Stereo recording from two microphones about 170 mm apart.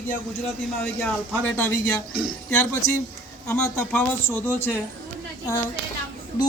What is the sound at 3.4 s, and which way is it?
Speech, 15° left (ahead or behind).